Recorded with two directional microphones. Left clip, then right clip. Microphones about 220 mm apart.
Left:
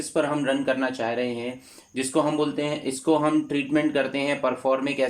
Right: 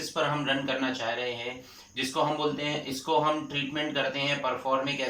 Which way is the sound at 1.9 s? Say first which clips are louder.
Left 4 dB; 45° left (ahead or behind).